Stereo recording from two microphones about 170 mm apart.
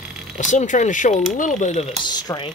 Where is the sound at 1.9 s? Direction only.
25° left (ahead or behind).